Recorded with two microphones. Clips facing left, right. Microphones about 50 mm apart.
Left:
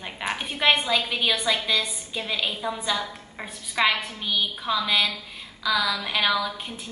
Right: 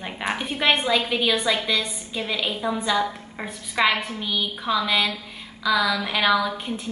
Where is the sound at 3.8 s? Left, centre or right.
Centre.